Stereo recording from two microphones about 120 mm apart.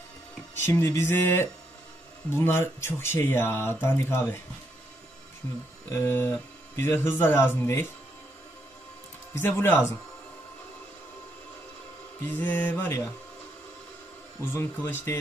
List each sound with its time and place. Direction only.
0.6 s speech: 20° left (ahead or behind)
5.9 s speech: 20° left (ahead or behind)
9.6 s speech: 20° left (ahead or behind)
12.2 s mantra: 15° left (ahead or behind)
14.4 s speech: 20° left (ahead or behind)